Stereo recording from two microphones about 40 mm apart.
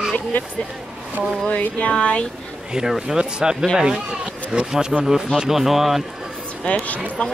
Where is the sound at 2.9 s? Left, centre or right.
Centre.